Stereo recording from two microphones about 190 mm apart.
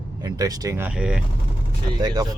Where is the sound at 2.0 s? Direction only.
20° right (ahead or behind).